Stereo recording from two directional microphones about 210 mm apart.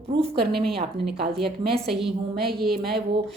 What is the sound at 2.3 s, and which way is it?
Speech, 50° right (ahead or behind).